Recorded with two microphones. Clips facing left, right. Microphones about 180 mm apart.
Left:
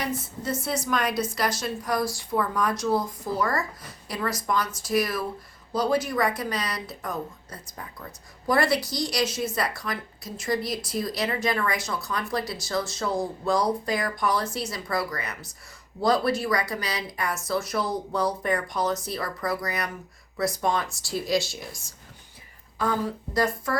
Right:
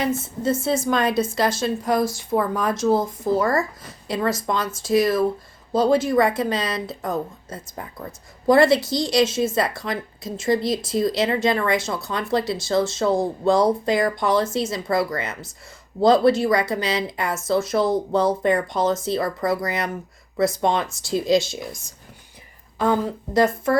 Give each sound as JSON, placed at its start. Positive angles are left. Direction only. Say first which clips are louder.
{"t": 0.0, "sound": "a woman's voice", "louder": "right 7 dB", "side_deg": -25}
{"t": 22.8, "sound": "a woman's voice", "louder": "right 6 dB", "side_deg": -25}